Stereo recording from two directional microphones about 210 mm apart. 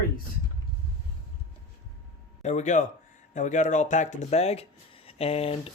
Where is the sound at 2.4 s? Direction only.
35° left (ahead or behind).